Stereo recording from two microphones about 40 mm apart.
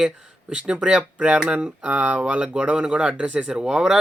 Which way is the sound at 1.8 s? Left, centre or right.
Right.